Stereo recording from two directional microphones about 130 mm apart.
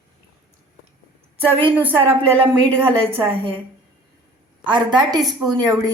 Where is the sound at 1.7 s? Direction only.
15° right (ahead or behind).